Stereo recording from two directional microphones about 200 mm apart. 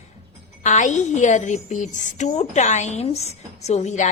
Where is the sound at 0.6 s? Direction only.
35° left (ahead or behind).